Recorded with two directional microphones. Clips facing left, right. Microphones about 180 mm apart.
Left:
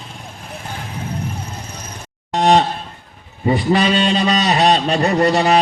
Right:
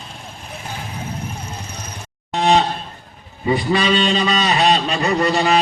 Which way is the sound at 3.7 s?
45° left (ahead or behind).